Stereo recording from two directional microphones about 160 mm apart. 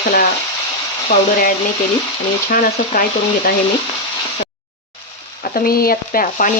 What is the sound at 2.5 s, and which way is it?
Speech, 60° left (ahead or behind).